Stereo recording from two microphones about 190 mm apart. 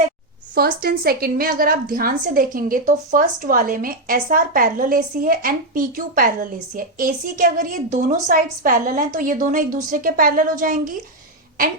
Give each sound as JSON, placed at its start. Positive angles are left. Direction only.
{"t": 0.5, "sound": "a woman's voice", "side_deg": -50}